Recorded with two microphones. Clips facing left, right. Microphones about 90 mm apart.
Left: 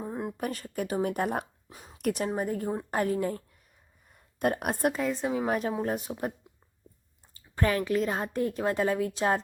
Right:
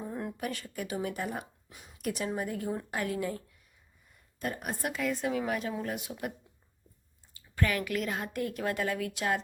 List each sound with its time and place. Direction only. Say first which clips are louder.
0.0 s a sound: left 3 dB; 25° left (ahead or behind)
0.3 s speech: left 4 dB; 40° left (ahead or behind)
1.7 s speech: left 6 dB; 35° left (ahead or behind)
2.0 s a woman's voice: left 4 dB; 50° left (ahead or behind)
4.1 s a sound: left 8 dB; 60° left (ahead or behind)
4.9 s a woman's voice: left 2 dB; 30° left (ahead or behind)
5.5 s a woman's voice: left 5 dB; 40° left (ahead or behind)
7.5 s a woman's voice: left 4 dB; 30° left (ahead or behind)